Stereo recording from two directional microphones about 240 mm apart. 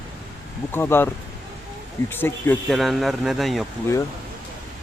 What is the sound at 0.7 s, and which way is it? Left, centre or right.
Speech, centre.